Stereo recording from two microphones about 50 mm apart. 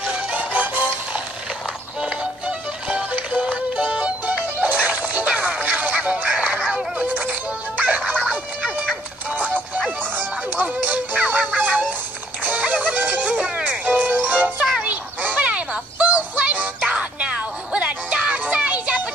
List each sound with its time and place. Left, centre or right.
0.1 s music: right
2.4 s music: right
8.3 s fowl: right
9.8 s music: right
13.8 s music: right
14.8 s a sound: right
16.3 s music: right